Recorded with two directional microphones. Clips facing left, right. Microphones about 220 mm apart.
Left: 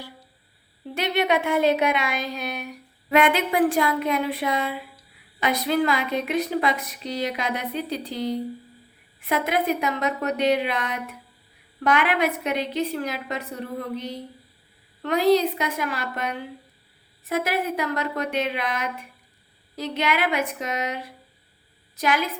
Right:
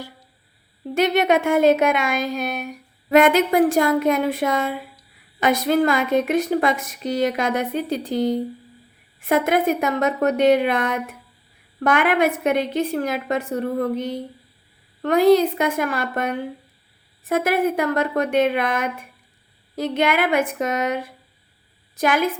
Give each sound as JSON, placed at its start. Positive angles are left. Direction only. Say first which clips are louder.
{"t": 0.9, "sound": "speech", "louder": "right 5 dB", "side_deg": -45}